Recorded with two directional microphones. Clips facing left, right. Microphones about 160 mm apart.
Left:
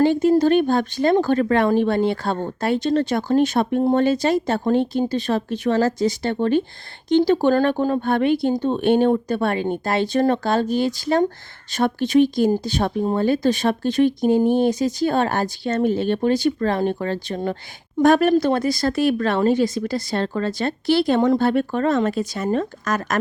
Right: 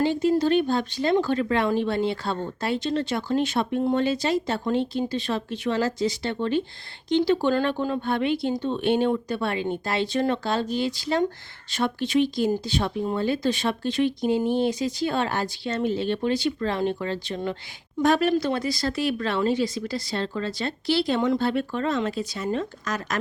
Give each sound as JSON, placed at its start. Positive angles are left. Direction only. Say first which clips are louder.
{"t": 0.0, "sound": "speech", "louder": "left 6 dB", "side_deg": 50}